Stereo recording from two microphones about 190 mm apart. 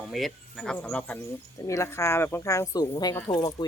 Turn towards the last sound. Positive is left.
turn(degrees=20)  # may be behind; listen again after turning